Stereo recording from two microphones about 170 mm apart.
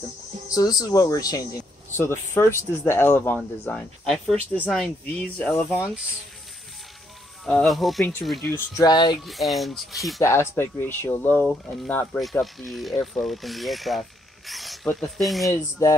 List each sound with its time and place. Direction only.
0.6 s speech: 20° left (ahead or behind)
7.4 s speech: centre (ahead or behind)
8.5 s speech: 15° left (ahead or behind)
9.2 s speech: centre (ahead or behind)
10.2 s speech: 15° left (ahead or behind)